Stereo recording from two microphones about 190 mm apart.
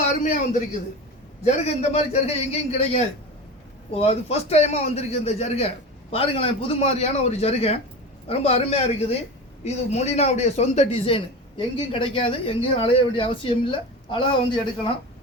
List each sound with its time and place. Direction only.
1.5 s a man's voice: 35° left (ahead or behind)